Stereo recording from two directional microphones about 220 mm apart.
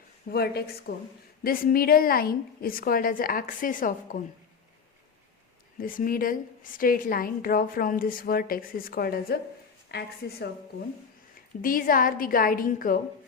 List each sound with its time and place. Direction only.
0.3 s a woman's voice: 45° left (ahead or behind)
5.8 s a woman's voice: 40° left (ahead or behind)
11.6 s a woman's voice: 40° left (ahead or behind)